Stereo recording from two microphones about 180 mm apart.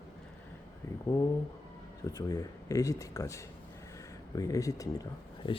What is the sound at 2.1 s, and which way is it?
Speech, 20° left (ahead or behind).